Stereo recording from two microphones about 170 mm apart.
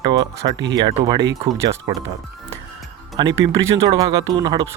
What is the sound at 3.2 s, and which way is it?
Speech, 25° right (ahead or behind).